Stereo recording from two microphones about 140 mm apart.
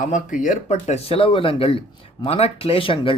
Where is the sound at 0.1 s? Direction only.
65° left (ahead or behind).